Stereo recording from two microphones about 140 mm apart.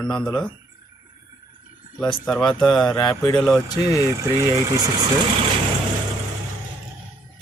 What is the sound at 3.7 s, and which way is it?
Speech, 25° left (ahead or behind).